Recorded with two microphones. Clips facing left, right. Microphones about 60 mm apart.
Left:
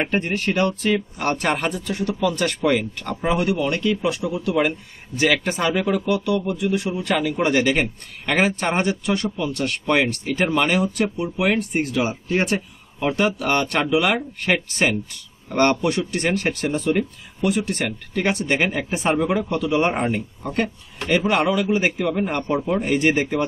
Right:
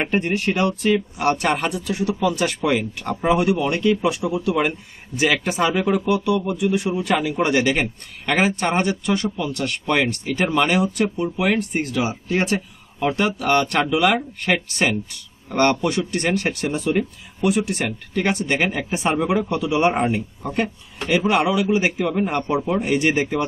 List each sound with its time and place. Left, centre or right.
0.0 s a man's voice: centre; by 4.6 s right
4.6 s a man's voice: centre
16.3 s a man's voice: centre